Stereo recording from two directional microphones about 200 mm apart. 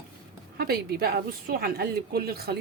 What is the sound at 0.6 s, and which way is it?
A woman's voice, 50° right (ahead or behind).